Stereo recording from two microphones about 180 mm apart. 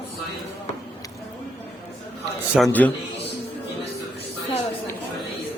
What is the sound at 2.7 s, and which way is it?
Speech, 10° left (ahead or behind).